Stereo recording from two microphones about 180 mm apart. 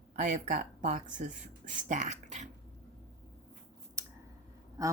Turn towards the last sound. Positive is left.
turn(degrees=-20)  # may be behind; listen again after turning